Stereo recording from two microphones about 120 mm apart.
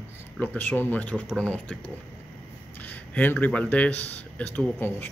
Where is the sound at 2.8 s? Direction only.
15° left (ahead or behind).